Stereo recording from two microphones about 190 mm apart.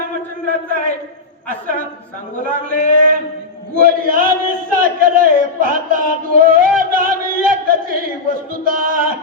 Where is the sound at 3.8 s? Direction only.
50° right (ahead or behind).